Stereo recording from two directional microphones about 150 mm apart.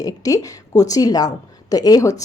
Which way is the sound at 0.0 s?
25° left (ahead or behind).